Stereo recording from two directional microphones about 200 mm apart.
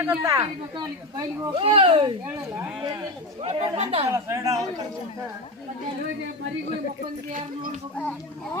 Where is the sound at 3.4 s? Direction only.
30° right (ahead or behind).